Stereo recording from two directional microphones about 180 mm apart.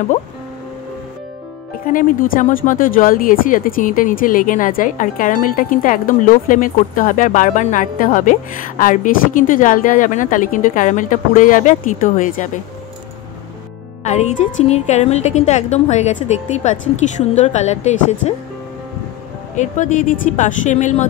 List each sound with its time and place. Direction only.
1.9 s speech: 50° left (ahead or behind)
14.0 s a woman's voice: 40° left (ahead or behind)
19.5 s speech: 45° left (ahead or behind)